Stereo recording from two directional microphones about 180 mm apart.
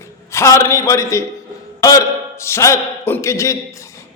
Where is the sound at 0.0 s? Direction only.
15° left (ahead or behind).